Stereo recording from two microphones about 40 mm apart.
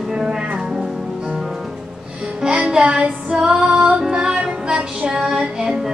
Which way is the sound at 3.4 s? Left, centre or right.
Right.